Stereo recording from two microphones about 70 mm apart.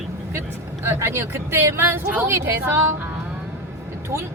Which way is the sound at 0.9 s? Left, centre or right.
Right.